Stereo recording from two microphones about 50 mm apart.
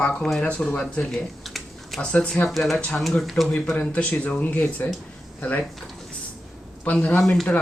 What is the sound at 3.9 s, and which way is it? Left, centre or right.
Speech, left.